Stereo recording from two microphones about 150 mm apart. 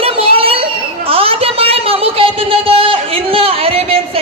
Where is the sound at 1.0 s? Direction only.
40° right (ahead or behind).